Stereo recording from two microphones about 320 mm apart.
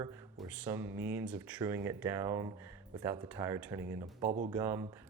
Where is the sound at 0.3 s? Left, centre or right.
Centre.